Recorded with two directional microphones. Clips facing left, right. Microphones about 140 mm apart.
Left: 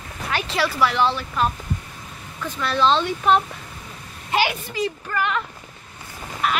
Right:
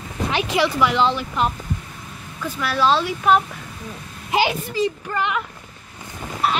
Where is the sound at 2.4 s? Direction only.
5° right (ahead or behind).